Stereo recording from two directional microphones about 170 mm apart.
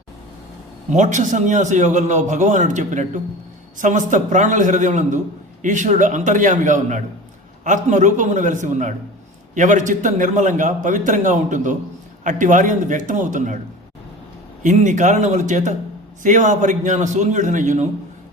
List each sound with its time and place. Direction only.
0.9 s a man's voice: 45° right (ahead or behind)
14.6 s a man's voice: 45° right (ahead or behind)